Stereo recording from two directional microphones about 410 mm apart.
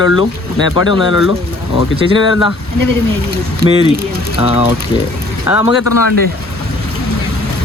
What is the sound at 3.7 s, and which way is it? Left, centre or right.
Speech, centre.